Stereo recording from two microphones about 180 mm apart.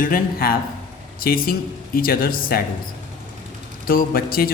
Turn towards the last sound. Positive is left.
turn(degrees=55)  # may be behind; listen again after turning